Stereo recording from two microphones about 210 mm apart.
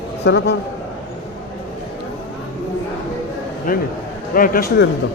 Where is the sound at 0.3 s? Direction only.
55° left (ahead or behind).